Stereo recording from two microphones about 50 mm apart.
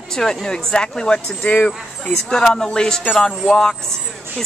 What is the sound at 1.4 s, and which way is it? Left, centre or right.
Speech, left.